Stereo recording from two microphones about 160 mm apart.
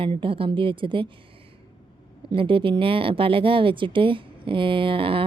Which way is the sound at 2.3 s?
30° right (ahead or behind).